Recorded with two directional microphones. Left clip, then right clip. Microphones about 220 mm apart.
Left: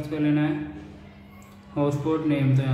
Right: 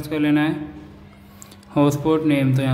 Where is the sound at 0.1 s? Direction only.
45° right (ahead or behind).